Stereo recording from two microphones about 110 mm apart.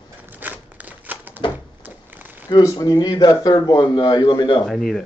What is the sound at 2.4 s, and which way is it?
Speech, 35° left (ahead or behind).